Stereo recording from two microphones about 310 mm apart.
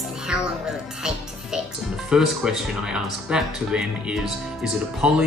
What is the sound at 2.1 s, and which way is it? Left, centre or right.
Speech, centre.